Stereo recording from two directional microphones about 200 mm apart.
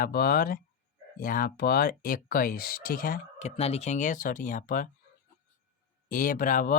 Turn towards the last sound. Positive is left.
turn(degrees=45)  # may be behind; listen again after turning